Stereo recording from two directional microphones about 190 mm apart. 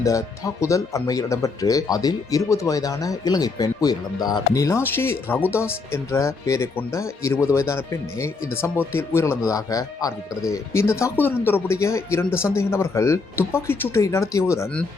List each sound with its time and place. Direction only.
0.0 s speech: 15° left (ahead or behind)